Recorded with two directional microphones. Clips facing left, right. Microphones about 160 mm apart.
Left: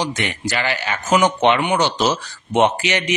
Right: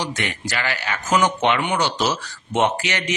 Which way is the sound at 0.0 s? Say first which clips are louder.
Left 3 dB; 20° left (ahead or behind).